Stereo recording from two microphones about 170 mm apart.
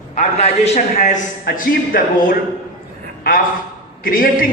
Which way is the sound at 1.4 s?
55° left (ahead or behind).